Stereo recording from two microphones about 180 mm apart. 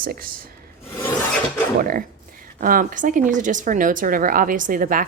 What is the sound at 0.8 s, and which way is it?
Filing, 15° left (ahead or behind).